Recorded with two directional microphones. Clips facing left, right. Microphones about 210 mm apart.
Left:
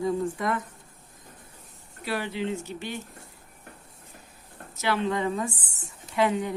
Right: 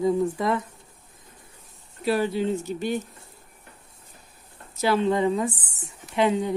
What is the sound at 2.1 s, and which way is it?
Speech, 40° right (ahead or behind).